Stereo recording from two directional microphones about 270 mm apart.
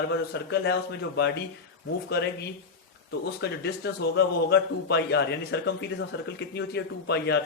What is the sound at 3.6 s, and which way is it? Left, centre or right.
A man's voice, left.